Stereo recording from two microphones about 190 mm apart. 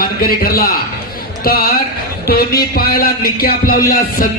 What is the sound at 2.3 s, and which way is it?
A man's voice, 50° left (ahead or behind).